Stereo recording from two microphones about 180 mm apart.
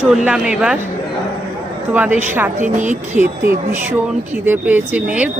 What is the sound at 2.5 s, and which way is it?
Speech, 45° right (ahead or behind).